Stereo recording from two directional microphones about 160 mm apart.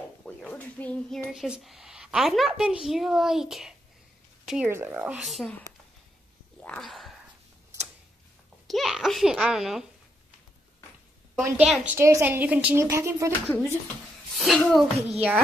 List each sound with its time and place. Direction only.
0.2 s a child's voice: 5° left (ahead or behind)
4.6 s a woman's voice: 15° right (ahead or behind)
6.6 s a sound: 5° left (ahead or behind)
8.6 s a child's voice: centre (ahead or behind)
11.4 s a woman's voice: 10° right (ahead or behind)
13.3 s speech: 10° left (ahead or behind)
14.3 s speech: centre (ahead or behind)
15.0 s a child's voice: 40° right (ahead or behind)